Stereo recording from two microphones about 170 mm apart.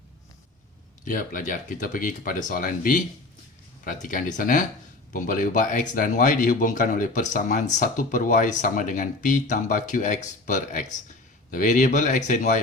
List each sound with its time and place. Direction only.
1.0 s speech: 55° left (ahead or behind)
4.0 s speech: 50° left (ahead or behind)